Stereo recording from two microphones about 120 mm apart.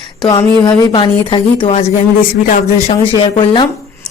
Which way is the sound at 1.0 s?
45° left (ahead or behind).